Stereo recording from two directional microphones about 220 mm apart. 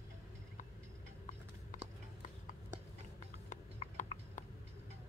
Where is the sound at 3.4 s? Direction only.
35° left (ahead or behind).